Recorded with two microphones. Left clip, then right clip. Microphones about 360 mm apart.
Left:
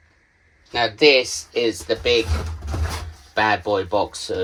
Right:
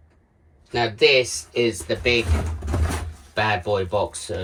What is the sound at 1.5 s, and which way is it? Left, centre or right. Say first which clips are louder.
Speech: left 1 dB; left.